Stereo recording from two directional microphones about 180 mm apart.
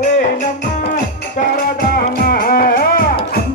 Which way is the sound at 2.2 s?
55° left (ahead or behind).